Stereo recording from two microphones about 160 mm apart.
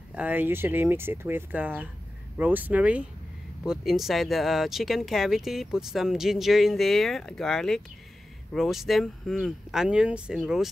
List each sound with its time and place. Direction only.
0.1 s speech: 10° right (ahead or behind)